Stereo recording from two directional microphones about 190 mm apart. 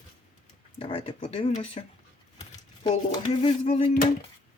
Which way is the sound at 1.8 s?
35° left (ahead or behind).